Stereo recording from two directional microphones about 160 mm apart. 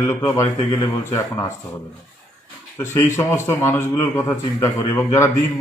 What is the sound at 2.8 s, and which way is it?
A man's voice, 15° left (ahead or behind).